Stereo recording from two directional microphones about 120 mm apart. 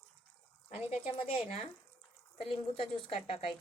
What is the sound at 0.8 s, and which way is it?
Speech, 55° left (ahead or behind).